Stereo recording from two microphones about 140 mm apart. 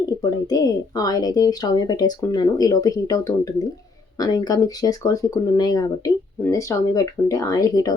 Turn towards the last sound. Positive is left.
turn(degrees=25)  # may be behind; listen again after turning